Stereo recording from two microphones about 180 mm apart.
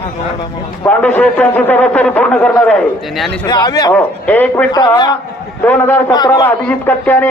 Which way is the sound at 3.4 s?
20° left (ahead or behind).